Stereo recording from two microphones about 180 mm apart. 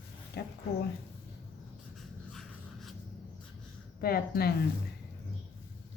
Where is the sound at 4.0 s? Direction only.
55° left (ahead or behind).